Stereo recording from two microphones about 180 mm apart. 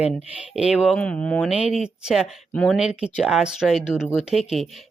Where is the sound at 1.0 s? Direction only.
5° left (ahead or behind).